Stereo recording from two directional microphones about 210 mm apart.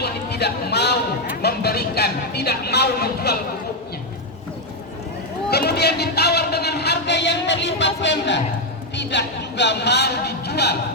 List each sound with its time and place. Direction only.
0.0 s a sound: 50° left (ahead or behind)
1.4 s a man's voice: 50° left (ahead or behind)
5.5 s a man's voice: 50° left (ahead or behind)